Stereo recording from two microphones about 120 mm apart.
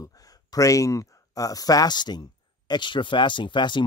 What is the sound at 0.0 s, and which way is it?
Speech, 30° left (ahead or behind).